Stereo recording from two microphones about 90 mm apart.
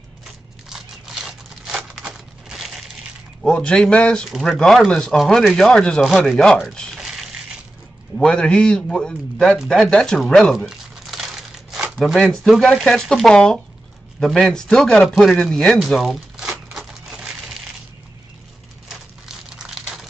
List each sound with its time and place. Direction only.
0.7 s crunch: 5° right (ahead or behind)
1.9 s a sound: 5° right (ahead or behind)
3.4 s speech: 10° left (ahead or behind)
8.2 s speech: 10° left (ahead or behind)
16.3 s a sound: 5° right (ahead or behind)
18.9 s crumpling: 5° right (ahead or behind)